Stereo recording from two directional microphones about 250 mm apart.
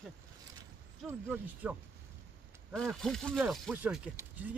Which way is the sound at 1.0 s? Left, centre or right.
Centre.